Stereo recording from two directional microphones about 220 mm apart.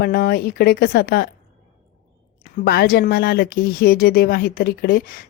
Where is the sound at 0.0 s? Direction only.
45° left (ahead or behind).